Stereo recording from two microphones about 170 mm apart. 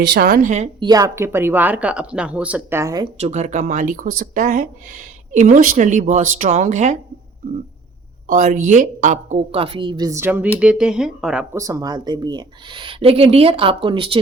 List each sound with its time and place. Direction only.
0.0 s a woman's voice: 80° right
0.3 s speech: 50° right (ahead or behind)
0.8 s speech: 20° right (ahead or behind)
3.2 s speech: 40° right (ahead or behind)
8.3 s a woman's voice: 50° right (ahead or behind); by 11.4 s 5° right (ahead or behind)
11.5 s speech: 20° right (ahead or behind)